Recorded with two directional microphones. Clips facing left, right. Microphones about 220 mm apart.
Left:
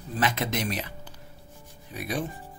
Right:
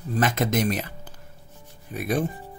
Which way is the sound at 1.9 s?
50° right (ahead or behind).